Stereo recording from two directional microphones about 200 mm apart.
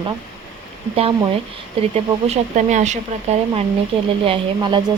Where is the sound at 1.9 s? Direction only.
35° right (ahead or behind).